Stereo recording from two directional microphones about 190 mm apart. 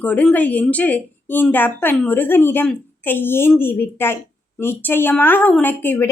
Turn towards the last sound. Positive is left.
turn(degrees=10)  # may be behind; listen again after turning